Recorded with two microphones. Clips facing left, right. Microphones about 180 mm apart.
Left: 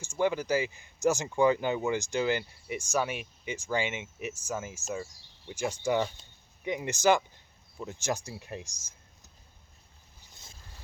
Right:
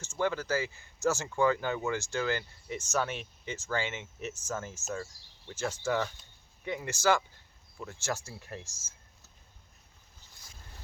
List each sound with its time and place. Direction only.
0.0 s speech: 15° left (ahead or behind)